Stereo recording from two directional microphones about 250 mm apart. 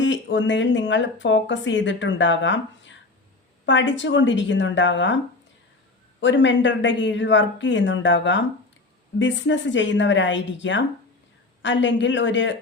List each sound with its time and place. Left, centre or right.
0.0 s speech: left